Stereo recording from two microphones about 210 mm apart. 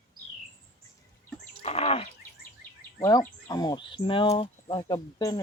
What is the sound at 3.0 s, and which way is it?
Speech, 15° left (ahead or behind).